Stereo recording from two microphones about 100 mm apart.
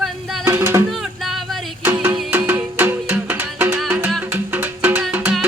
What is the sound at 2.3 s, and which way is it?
Music, 20° right (ahead or behind).